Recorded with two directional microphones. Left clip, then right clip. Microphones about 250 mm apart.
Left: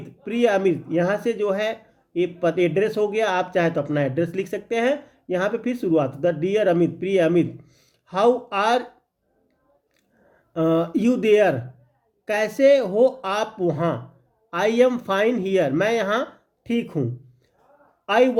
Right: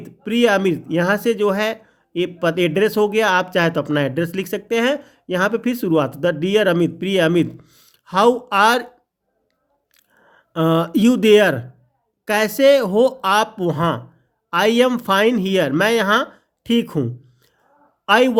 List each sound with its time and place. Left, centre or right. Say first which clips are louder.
0.0 s speech: right 4 dB; right
10.2 s speech: right 3 dB; right